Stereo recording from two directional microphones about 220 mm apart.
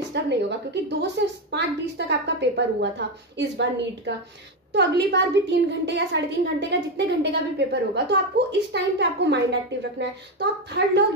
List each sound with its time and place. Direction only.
0.1 s a woman's voice: 50° right (ahead or behind)